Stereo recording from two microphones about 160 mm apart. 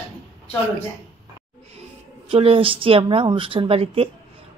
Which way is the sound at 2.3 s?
35° right (ahead or behind).